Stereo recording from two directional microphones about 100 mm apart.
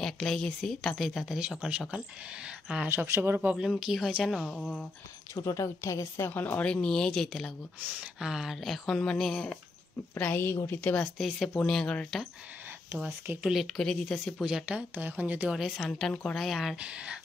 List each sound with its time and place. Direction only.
0.0 s speech: 5° left (ahead or behind); by 3.5 s 20° right (ahead or behind)
3.5 s speech: 5° right (ahead or behind)
5.3 s a woman's voice: 30° left (ahead or behind); by 7.5 s 5° left (ahead or behind)
7.8 s speech: 10° right (ahead or behind)
10.1 s a woman's voice: 15° left (ahead or behind)
11.1 s speech: centre (ahead or behind)
13.0 s speech: 15° right (ahead or behind)
13.5 s speech: centre (ahead or behind)
14.4 s speech: 10° right (ahead or behind)
15.5 s speech: 5° right (ahead or behind)
15.9 s speech: 5° left (ahead or behind)
16.7 s speech: 10° right (ahead or behind)